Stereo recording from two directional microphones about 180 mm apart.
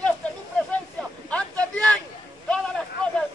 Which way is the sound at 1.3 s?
5° left (ahead or behind).